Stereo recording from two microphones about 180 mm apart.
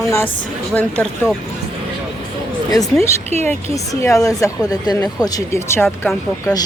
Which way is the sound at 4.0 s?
15° left (ahead or behind).